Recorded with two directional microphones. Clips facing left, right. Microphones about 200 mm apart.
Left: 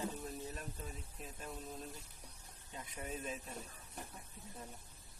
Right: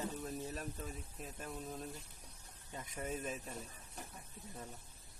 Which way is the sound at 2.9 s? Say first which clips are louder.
Right 3 dB; 45° right (ahead or behind).